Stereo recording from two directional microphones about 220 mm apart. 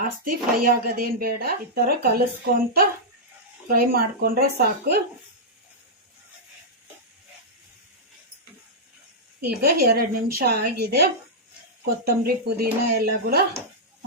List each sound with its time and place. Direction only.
0.0 s speech: 40° right (ahead or behind)
3.7 s speech: 40° right (ahead or behind)
9.6 s speech: 45° right (ahead or behind)